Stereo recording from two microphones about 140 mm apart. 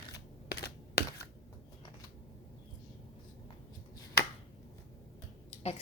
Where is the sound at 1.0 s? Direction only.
90° left.